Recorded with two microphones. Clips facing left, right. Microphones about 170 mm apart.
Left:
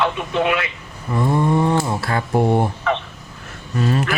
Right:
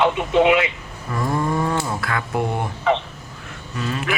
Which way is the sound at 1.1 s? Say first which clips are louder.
Left 4 dB; 25° left (ahead or behind).